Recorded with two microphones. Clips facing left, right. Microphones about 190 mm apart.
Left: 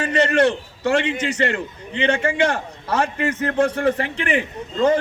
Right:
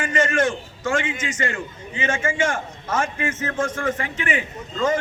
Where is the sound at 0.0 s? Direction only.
35° left (ahead or behind).